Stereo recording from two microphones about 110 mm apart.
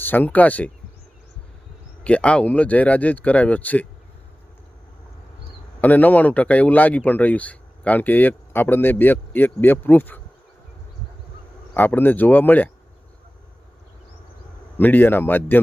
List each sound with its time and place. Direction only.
0.0 s speech: 15° left (ahead or behind)
2.0 s speech: 10° left (ahead or behind)
5.8 s speech: 15° left (ahead or behind)
11.7 s speech: 15° left (ahead or behind)
14.8 s speech: 15° left (ahead or behind)